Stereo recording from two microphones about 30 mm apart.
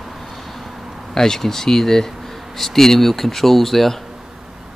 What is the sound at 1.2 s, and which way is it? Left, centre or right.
Speech, centre.